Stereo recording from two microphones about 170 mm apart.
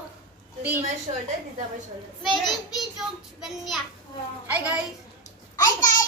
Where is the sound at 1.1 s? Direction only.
35° right (ahead or behind).